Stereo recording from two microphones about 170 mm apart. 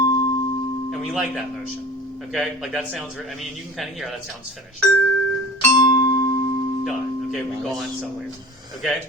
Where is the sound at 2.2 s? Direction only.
Centre (ahead or behind).